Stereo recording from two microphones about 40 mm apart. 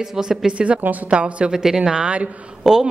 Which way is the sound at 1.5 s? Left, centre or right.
Centre.